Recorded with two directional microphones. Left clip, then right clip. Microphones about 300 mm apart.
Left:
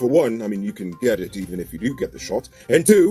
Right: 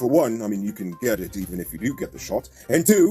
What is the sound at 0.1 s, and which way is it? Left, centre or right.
Speech, right.